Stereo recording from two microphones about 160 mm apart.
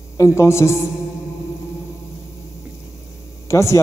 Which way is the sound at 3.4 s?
20° left (ahead or behind).